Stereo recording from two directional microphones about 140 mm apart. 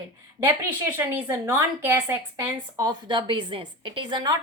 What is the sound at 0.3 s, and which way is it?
A woman's voice, 15° right (ahead or behind).